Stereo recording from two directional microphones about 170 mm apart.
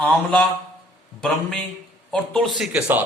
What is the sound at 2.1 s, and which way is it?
Speech, 5° left (ahead or behind).